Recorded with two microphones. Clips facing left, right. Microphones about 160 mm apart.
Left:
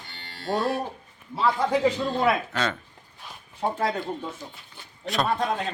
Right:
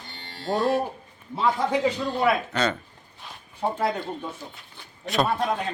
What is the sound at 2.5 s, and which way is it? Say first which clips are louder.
Speech: right 3 dB; centre (ahead or behind).